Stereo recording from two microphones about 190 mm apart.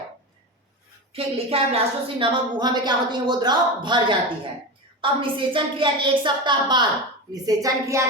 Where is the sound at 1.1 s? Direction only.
30° right (ahead or behind).